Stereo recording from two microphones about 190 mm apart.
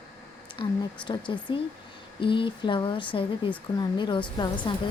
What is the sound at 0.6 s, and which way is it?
A woman's voice, 25° left (ahead or behind).